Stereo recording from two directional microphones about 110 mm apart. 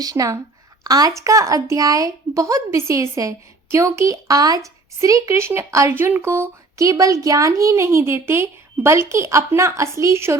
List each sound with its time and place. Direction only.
0.0 s speech: 35° right (ahead or behind)